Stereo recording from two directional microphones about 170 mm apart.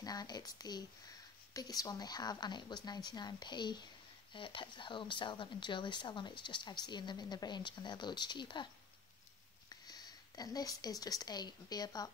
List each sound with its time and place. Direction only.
0.0 s a woman's voice: 25° left (ahead or behind)
9.7 s speech: 25° left (ahead or behind)